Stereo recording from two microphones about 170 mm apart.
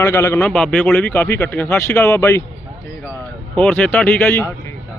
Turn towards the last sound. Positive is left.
turn(degrees=10)  # may be behind; listen again after turning